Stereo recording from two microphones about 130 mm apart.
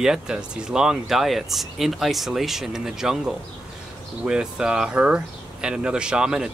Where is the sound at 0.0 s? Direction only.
5° right (ahead or behind).